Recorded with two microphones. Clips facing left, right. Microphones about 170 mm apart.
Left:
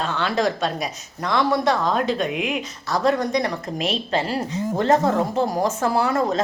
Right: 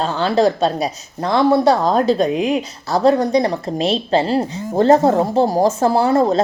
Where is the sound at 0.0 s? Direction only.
30° right (ahead or behind).